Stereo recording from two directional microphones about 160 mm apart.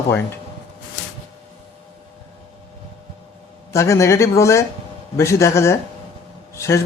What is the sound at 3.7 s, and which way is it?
Speech, 20° left (ahead or behind).